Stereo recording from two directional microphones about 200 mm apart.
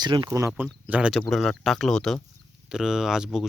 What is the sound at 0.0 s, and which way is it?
Speech, 20° right (ahead or behind).